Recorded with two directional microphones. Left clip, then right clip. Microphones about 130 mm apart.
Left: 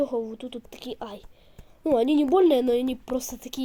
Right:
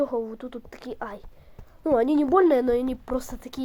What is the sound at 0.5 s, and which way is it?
A woman's voice, 50° left (ahead or behind).